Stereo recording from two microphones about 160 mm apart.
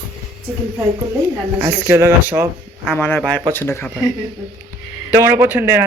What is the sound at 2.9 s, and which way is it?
Speech, 10° left (ahead or behind).